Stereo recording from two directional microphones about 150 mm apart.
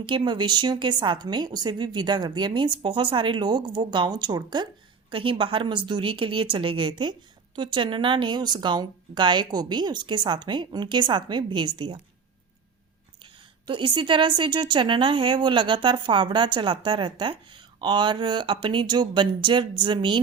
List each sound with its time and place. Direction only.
0.0 s a woman's voice: 35° right (ahead or behind)
13.7 s a woman's voice: 30° right (ahead or behind)